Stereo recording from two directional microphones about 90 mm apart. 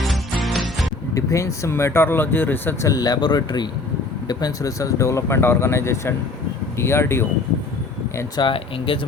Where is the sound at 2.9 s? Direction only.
50° left (ahead or behind).